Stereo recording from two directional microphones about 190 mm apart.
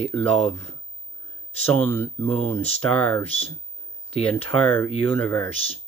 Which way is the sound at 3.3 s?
30° left (ahead or behind).